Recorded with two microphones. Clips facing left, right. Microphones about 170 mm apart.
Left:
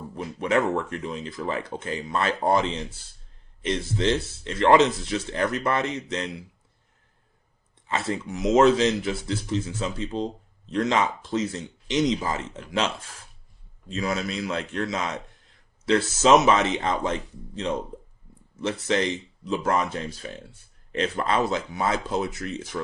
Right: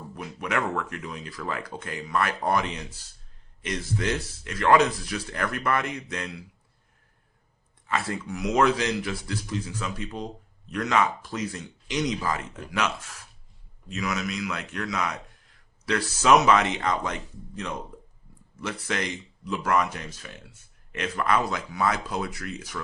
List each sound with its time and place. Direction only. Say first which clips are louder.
0.1 s speech: left 6 dB; 25° left (ahead or behind)
7.9 s speech: left 1 dB; 25° left (ahead or behind)